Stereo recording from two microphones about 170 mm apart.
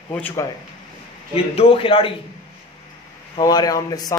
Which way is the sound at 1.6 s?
30° left (ahead or behind).